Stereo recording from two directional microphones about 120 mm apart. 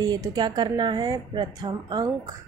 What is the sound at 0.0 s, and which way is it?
Speech, 35° right (ahead or behind).